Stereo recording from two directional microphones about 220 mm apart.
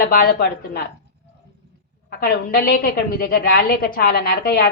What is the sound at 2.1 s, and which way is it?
A woman's voice, 45° left (ahead or behind).